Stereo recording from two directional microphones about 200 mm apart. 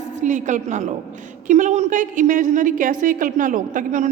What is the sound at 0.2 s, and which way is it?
A woman's voice, 40° right (ahead or behind).